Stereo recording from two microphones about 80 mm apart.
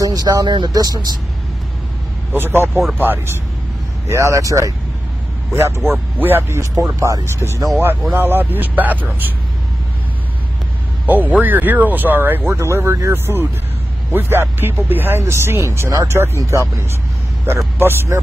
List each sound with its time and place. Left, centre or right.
0.0 s speech: right
2.3 s speech: right
4.1 s speech: right
6.6 s speech: right
8.1 s speech: right
11.1 s speech: right
17.7 s speech: right